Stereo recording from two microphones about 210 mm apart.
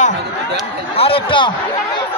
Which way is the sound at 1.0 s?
25° left (ahead or behind).